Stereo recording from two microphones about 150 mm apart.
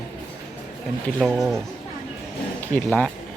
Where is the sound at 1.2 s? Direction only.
Centre (ahead or behind).